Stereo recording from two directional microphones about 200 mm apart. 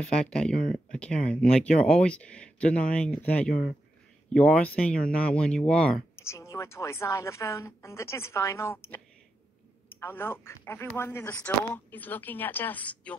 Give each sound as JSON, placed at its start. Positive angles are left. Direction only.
{"t": 0.1, "sound": "speech", "side_deg": 5}
{"t": 3.4, "sound": "speech", "side_deg": 45}
{"t": 4.3, "sound": "speech", "side_deg": 5}